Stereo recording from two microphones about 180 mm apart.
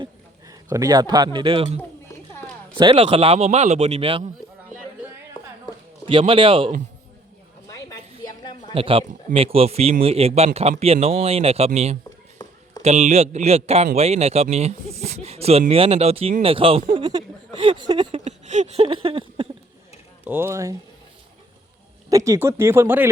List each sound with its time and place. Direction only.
0.0 s a man's voice: 20° right (ahead or behind); by 4.3 s 35° right (ahead or behind)
6.1 s speech: 30° right (ahead or behind)
7.7 s a sound: 20° left (ahead or behind)
8.7 s a man's voice: 30° right (ahead or behind)
12.4 s run: 20° left (ahead or behind)
12.8 s a man's voice: 40° right (ahead or behind)
18.3 s a sound: 40° right (ahead or behind)
20.2 s speech: 10° right (ahead or behind)
22.1 s speech: 15° right (ahead or behind)